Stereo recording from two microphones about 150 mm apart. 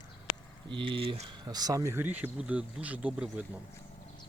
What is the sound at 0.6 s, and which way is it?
Speech, 35° right (ahead or behind).